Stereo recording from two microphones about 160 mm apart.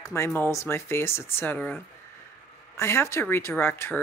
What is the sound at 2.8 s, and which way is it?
Speech, 15° left (ahead or behind).